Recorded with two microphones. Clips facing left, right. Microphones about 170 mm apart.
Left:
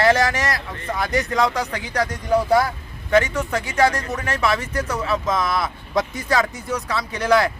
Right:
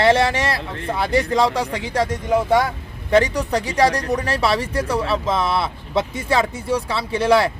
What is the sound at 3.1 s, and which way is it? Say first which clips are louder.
Speech: right 2 dB; 35° right (ahead or behind).